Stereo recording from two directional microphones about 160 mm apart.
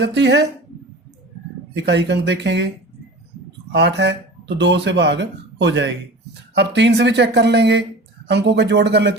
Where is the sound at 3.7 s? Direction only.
90° right.